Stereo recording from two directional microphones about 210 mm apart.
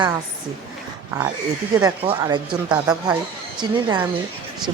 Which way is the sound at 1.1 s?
15° right (ahead or behind).